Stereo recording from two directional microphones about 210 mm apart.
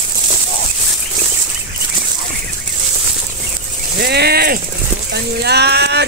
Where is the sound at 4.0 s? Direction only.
50° right (ahead or behind).